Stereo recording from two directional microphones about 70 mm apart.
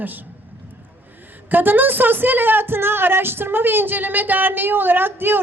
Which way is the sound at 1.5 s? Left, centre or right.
Right.